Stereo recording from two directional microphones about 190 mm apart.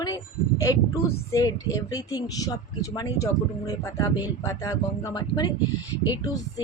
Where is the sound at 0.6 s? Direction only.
15° left (ahead or behind).